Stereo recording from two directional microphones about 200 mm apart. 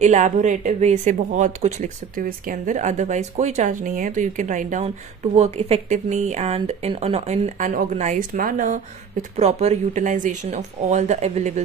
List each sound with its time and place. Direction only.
0.0 s speech: 35° right (ahead or behind)